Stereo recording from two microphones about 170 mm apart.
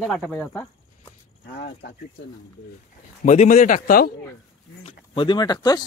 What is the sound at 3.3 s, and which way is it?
Speech, 45° left (ahead or behind).